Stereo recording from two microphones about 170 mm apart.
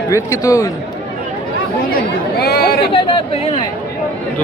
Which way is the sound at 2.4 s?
65° left (ahead or behind).